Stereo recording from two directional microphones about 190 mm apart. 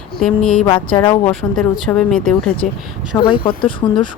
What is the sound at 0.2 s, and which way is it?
Speech, 5° left (ahead or behind).